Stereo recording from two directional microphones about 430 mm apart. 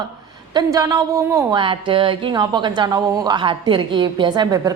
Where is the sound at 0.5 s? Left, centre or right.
Centre.